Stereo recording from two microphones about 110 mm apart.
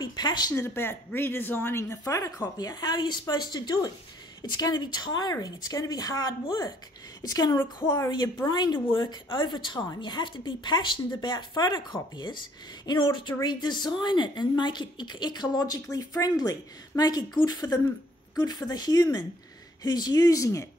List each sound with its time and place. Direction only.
0.0 s speech: 40° left (ahead or behind)
0.6 s a woman's voice: 20° left (ahead or behind)